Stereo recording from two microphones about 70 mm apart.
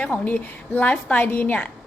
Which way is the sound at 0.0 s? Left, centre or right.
Centre.